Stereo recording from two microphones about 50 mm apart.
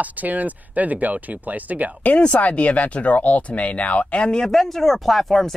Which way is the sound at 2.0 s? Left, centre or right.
Left.